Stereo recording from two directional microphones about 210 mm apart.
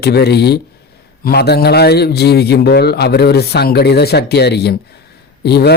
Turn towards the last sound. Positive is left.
turn(degrees=50)  # may be behind; listen again after turning